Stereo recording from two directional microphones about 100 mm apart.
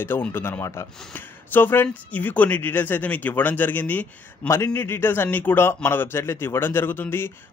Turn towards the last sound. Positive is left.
turn(degrees=20)  # may be behind; listen again after turning